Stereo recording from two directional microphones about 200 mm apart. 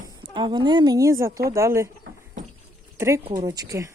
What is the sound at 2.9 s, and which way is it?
Speech, 15° right (ahead or behind).